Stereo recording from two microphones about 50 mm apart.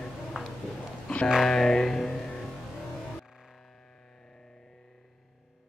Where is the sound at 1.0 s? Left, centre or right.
Centre.